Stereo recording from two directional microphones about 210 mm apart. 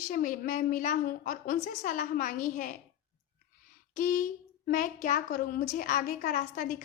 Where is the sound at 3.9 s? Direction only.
40° left (ahead or behind).